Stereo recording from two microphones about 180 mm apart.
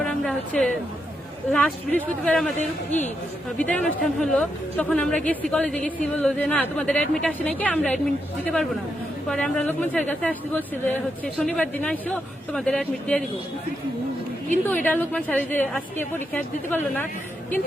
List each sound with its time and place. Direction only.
0.0 s speech: 5° left (ahead or behind)
2.6 s a woman's voice: 40° left (ahead or behind)
3.6 s speech: 5° left (ahead or behind)
9.3 s speech: 5° left (ahead or behind)
14.7 s speech: 10° left (ahead or behind)